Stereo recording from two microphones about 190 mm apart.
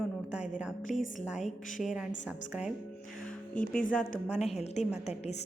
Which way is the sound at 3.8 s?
40° left (ahead or behind).